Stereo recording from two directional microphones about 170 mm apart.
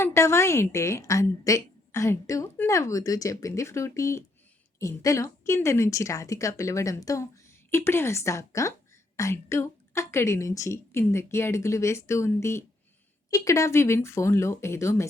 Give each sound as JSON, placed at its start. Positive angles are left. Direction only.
{"t": 0.0, "sound": "a woman's voice", "side_deg": 15}